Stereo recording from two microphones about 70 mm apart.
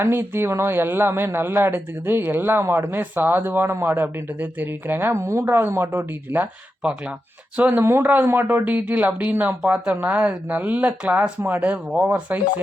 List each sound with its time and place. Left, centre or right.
0.0 s speech: right
5.1 s a woman's voice: right
7.5 s speech: right